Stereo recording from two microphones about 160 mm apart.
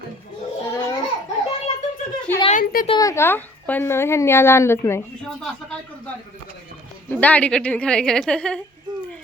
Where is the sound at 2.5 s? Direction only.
60° left (ahead or behind).